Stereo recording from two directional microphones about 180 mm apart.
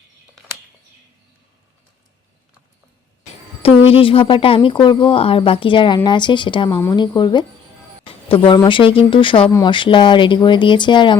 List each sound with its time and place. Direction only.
3.8 s speech: 30° left (ahead or behind)